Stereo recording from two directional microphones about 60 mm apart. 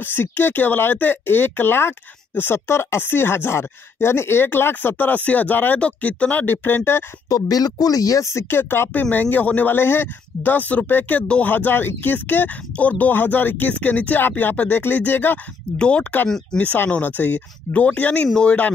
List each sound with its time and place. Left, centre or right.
0.0 s speech: left
7.2 s speech: left
8.5 s speech: left
9.8 s speech: left
11.2 s speech: centre
11.5 s speech: left
15.8 s speech: centre